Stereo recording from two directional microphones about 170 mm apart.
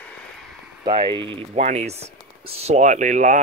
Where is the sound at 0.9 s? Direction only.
30° right (ahead or behind).